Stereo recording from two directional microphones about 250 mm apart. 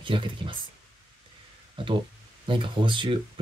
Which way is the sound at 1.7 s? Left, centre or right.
Centre.